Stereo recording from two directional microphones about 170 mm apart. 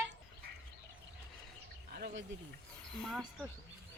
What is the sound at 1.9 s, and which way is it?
Speech, 75° right (ahead or behind).